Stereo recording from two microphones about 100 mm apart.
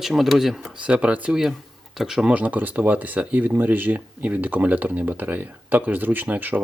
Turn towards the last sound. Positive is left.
turn(degrees=-15)  # may be behind; listen again after turning